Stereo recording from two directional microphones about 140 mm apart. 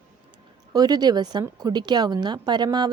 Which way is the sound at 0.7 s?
30° right (ahead or behind).